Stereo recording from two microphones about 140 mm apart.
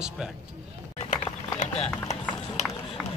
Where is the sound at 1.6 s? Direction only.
50° left (ahead or behind).